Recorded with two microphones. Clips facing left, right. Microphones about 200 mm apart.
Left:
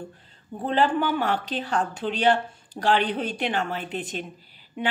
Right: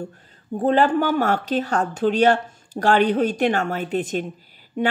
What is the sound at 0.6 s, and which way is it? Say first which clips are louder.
Speech: right 5 dB; 45° right (ahead or behind).